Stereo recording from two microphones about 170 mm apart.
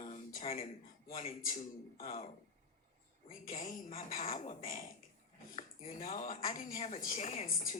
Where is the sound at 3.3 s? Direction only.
50° left (ahead or behind).